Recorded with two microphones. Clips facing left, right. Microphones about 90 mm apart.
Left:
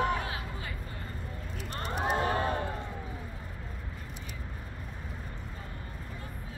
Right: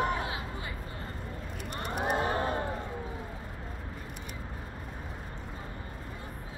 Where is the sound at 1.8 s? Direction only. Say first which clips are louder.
Even; 10° right (ahead or behind).